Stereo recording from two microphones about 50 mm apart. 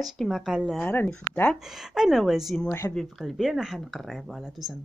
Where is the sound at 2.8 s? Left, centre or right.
Left.